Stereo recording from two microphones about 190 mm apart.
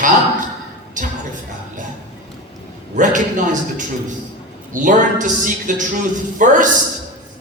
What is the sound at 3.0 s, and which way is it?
A man's voice, 45° right (ahead or behind).